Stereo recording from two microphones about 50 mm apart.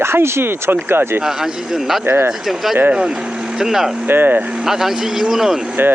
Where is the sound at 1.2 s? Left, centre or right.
Centre.